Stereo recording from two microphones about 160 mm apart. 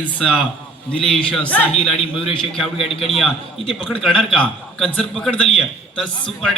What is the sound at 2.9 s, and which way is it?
Speech, 35° left (ahead or behind).